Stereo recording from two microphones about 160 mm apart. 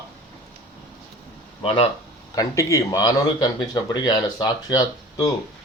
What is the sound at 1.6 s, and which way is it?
Speech, 35° left (ahead or behind).